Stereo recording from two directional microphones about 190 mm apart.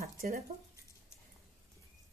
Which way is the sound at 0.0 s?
50° right (ahead or behind).